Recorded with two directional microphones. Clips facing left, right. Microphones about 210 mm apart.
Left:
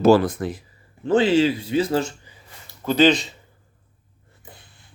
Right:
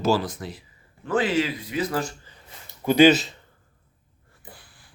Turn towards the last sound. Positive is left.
turn(degrees=25)  # may be behind; listen again after turning